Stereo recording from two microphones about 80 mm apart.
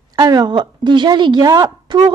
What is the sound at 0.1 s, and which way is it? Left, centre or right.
A woman's voice, right.